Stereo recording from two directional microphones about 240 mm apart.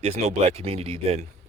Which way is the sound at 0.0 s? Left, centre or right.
Right.